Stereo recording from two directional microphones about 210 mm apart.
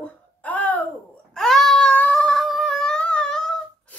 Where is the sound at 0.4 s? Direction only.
5° left (ahead or behind).